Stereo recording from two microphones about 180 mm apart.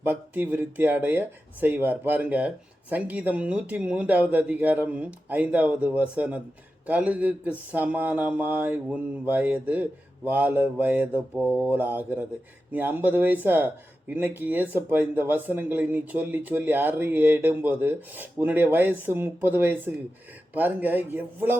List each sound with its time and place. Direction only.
0.0 s speech: 10° right (ahead or behind)